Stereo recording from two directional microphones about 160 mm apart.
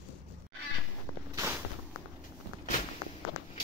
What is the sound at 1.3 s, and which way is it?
Walk, 15° right (ahead or behind).